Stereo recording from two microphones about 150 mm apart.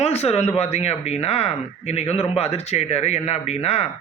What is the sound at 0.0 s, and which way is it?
Speech, 45° left (ahead or behind).